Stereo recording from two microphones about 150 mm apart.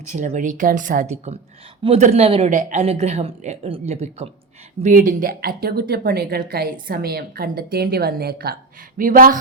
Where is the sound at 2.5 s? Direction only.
60° right (ahead or behind).